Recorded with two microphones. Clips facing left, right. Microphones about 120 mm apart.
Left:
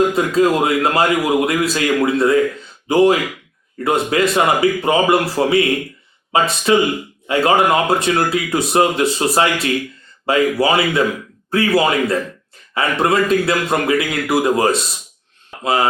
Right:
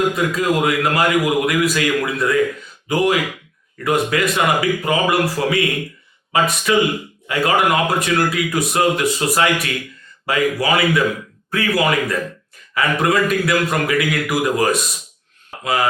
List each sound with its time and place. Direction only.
0.1 s a man's voice: 30° left (ahead or behind)